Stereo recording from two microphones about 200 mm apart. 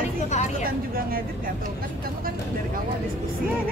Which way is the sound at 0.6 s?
45° right (ahead or behind).